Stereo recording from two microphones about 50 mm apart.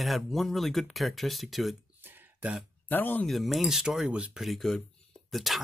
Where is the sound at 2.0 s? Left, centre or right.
Right.